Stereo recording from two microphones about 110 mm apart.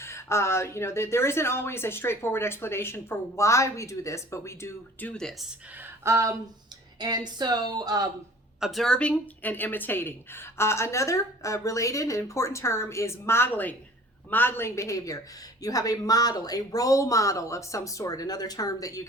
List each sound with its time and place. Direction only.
0.0 s a woman's voice: 25° left (ahead or behind)
5.1 s speech: 5° left (ahead or behind)
5.8 s a sound: 25° right (ahead or behind)
7.0 s speech: 40° right (ahead or behind)
8.6 s a woman's voice: centre (ahead or behind); by 19.0 s 30° left (ahead or behind)